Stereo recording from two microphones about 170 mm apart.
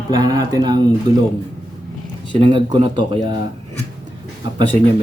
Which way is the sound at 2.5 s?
30° right (ahead or behind).